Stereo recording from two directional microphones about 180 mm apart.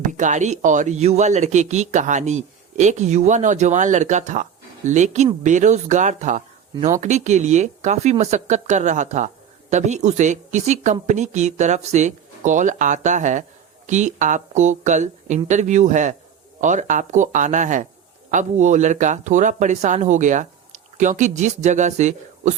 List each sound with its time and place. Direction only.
0.0 s speech: 45° right (ahead or behind)